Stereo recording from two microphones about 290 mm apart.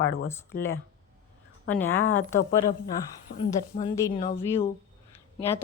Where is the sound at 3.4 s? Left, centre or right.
Centre.